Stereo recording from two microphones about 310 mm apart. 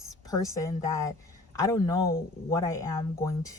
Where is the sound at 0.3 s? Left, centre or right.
Centre.